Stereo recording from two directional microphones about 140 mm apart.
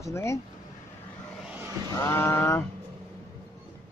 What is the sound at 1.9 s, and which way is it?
Speech, 20° left (ahead or behind).